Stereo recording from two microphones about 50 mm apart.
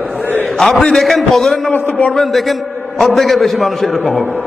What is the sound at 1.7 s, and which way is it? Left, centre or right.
Speech, left.